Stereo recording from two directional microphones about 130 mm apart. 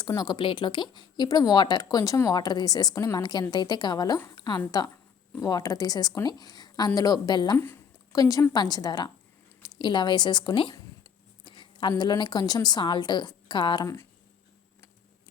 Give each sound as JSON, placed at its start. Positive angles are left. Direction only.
{"t": 0.1, "sound": "a woman's voice", "side_deg": 30}
{"t": 13.8, "sound": "a woman's voice", "side_deg": 20}